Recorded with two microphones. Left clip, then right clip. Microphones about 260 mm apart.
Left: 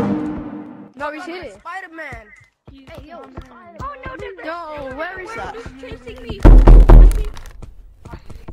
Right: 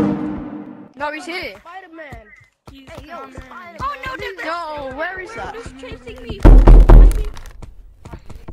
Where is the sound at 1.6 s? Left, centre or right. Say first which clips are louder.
Left 5 dB; left.